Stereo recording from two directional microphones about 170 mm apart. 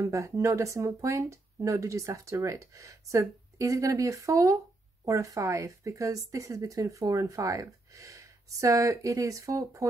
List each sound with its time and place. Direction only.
0.0 s speech: 15° right (ahead or behind)